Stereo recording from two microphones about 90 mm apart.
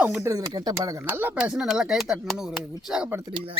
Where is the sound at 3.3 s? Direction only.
90° right.